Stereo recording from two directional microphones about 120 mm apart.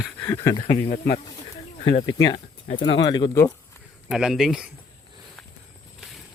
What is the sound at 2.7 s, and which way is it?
Speech, 50° left (ahead or behind).